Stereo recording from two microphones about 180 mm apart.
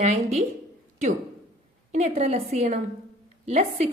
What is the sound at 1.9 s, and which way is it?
A woman's voice, 40° right (ahead or behind).